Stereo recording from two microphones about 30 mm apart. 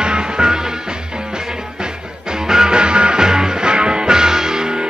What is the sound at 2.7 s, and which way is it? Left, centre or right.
Music, right.